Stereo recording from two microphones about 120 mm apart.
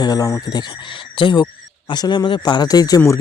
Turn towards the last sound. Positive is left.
turn(degrees=30)  # may be behind; listen again after turning